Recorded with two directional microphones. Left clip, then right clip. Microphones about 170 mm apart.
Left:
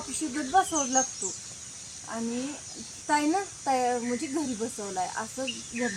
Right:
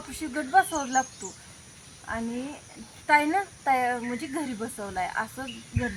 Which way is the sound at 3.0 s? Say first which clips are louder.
Right 4 dB; 15° right (ahead or behind).